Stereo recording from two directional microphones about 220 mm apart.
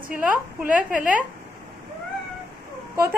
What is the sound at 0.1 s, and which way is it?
Speech, 5° right (ahead or behind).